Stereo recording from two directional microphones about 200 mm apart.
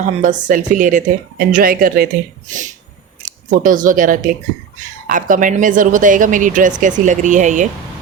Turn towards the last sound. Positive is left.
turn(degrees=-40)  # may be behind; listen again after turning